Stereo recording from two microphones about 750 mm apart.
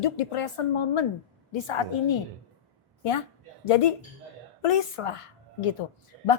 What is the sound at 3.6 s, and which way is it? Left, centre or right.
A woman's voice, left.